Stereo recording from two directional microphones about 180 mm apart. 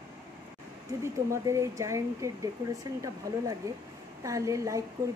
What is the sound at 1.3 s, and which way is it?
Speech, 15° right (ahead or behind).